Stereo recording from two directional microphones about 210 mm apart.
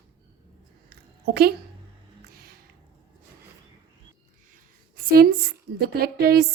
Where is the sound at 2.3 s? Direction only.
45° right (ahead or behind).